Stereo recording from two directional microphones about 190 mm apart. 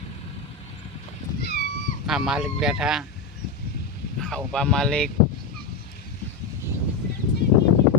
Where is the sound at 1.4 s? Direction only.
55° left (ahead or behind).